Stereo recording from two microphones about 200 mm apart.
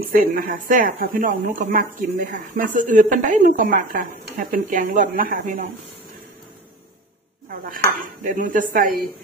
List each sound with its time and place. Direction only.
0.0 s speech: 45° right (ahead or behind)
7.5 s speech: 45° right (ahead or behind)